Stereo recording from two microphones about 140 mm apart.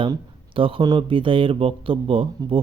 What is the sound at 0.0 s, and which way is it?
Speech, 35° right (ahead or behind).